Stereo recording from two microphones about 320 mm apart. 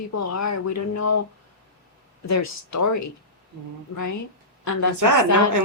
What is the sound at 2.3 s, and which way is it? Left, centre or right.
Speech, left.